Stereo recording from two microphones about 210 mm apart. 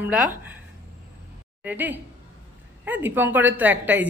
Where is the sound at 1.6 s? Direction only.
10° right (ahead or behind).